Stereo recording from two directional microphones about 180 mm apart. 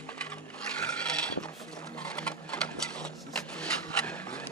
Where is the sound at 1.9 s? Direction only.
5° left (ahead or behind).